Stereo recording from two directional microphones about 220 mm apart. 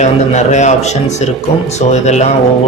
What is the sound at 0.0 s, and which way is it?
Speech, 30° left (ahead or behind).